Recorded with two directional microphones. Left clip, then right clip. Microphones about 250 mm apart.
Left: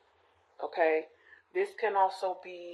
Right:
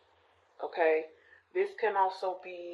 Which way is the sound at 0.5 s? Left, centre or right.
Left.